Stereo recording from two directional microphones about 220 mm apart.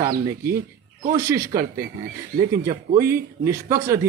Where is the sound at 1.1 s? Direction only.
15° right (ahead or behind).